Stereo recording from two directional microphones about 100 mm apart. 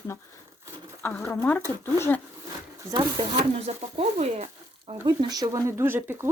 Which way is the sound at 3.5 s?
85° right.